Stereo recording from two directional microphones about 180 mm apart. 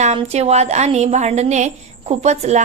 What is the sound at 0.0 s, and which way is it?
A woman's voice, 40° right (ahead or behind).